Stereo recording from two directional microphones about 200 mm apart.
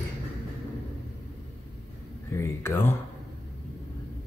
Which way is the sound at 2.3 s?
10° left (ahead or behind).